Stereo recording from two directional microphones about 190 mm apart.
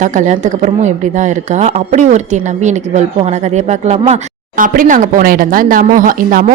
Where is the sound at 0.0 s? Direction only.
40° right (ahead or behind).